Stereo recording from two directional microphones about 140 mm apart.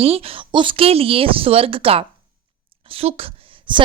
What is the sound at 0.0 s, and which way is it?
Speech, 45° right (ahead or behind).